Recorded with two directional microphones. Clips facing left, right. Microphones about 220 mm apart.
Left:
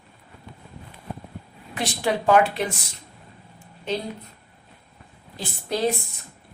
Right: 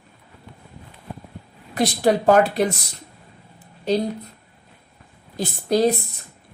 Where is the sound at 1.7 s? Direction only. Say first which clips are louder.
Right 6 dB; 40° right (ahead or behind).